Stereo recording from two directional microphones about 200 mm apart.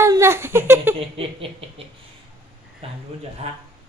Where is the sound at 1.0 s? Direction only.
25° right (ahead or behind).